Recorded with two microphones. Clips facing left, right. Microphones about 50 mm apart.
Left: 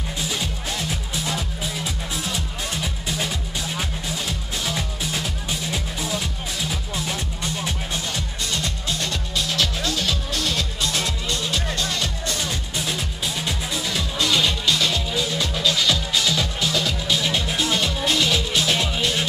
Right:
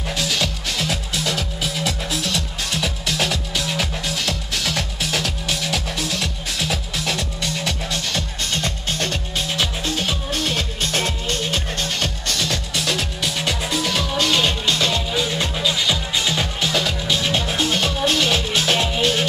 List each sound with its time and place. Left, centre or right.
0.1 s music: right
9.5 s music: right
15.5 s music: centre
16.2 s music: right
16.6 s music: right